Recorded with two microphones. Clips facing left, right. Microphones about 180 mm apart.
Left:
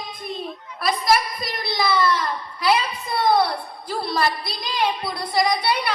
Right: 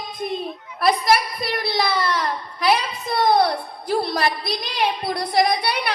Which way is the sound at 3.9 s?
55° right (ahead or behind).